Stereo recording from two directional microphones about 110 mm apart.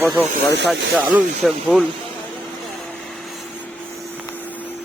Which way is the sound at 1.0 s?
15° right (ahead or behind).